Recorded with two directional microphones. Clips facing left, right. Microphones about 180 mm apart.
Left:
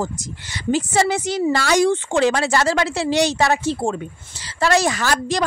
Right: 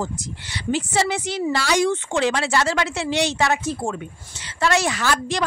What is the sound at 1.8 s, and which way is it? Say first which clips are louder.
A woman's voice: left 4 dB; 35° left (ahead or behind).